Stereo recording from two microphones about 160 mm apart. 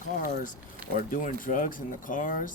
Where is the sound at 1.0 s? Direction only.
55° left (ahead or behind).